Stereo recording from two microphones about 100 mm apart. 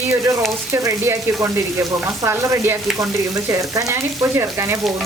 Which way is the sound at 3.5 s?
35° right (ahead or behind).